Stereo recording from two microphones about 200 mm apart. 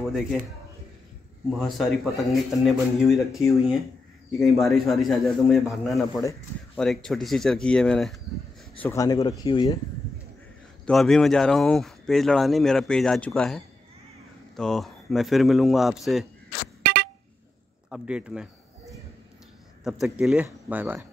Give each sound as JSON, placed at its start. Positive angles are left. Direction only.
{"t": 1.6, "sound": "speech", "side_deg": 0}
{"t": 4.4, "sound": "speech", "side_deg": 0}
{"t": 8.7, "sound": "a man's voice", "side_deg": 15}
{"t": 10.9, "sound": "speech", "side_deg": 0}
{"t": 14.6, "sound": "speech", "side_deg": 0}
{"t": 16.8, "sound": "vehicle horn", "side_deg": -55}
{"t": 17.8, "sound": "speech", "side_deg": -5}
{"t": 19.8, "sound": "speech", "side_deg": -5}